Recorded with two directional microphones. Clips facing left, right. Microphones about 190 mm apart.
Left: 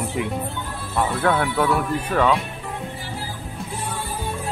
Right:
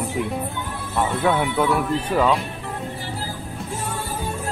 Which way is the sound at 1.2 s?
15° right (ahead or behind).